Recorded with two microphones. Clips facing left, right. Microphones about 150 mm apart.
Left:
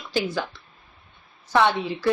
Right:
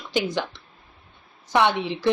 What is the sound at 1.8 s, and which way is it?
Speech, 20° right (ahead or behind).